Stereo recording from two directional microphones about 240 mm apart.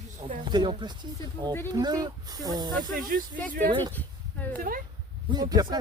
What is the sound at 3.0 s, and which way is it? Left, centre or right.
Speech, right.